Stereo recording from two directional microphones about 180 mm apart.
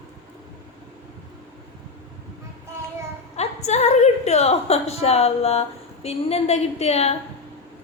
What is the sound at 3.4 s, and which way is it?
A woman's voice, 40° left (ahead or behind).